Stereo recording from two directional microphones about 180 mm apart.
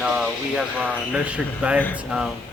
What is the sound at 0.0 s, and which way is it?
Speech, 5° right (ahead or behind).